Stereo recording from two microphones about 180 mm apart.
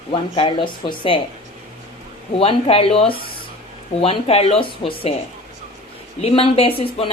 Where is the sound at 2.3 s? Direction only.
30° left (ahead or behind).